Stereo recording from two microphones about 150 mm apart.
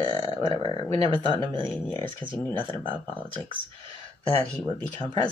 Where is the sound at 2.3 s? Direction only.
30° left (ahead or behind).